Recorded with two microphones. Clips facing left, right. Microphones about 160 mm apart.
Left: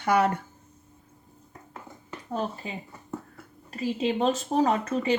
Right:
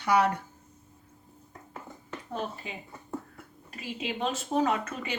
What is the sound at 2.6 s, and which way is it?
Speech, 35° left (ahead or behind).